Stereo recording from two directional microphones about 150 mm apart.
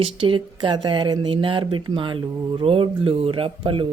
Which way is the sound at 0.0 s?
35° right (ahead or behind).